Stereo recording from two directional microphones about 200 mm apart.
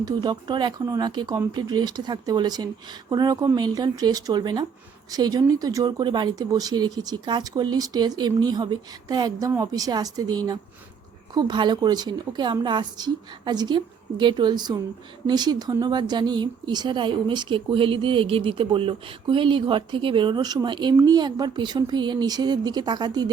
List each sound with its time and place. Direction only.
0.0 s speech: 20° right (ahead or behind)